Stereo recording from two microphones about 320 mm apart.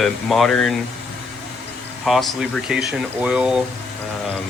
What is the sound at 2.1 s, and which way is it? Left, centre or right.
Speech, centre.